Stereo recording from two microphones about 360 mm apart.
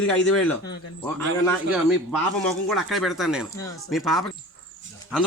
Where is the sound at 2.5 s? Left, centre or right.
Centre.